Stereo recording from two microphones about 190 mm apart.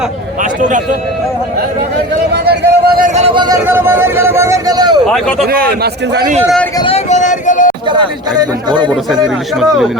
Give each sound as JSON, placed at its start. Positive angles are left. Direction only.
{"t": 0.6, "sound": "a man's voice", "side_deg": -40}
{"t": 2.3, "sound": "a sound", "side_deg": -60}
{"t": 3.2, "sound": "speech", "side_deg": -30}
{"t": 3.7, "sound": "a man's voice", "side_deg": -10}
{"t": 5.0, "sound": "speech", "side_deg": 5}
{"t": 5.5, "sound": "a man's voice", "side_deg": -50}
{"t": 6.7, "sound": "a sound", "side_deg": 30}
{"t": 8.4, "sound": "a man's voice", "side_deg": -25}
{"t": 9.2, "sound": "speech", "side_deg": 0}